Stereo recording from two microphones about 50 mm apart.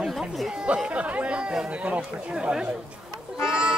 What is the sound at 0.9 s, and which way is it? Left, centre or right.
Speech, right.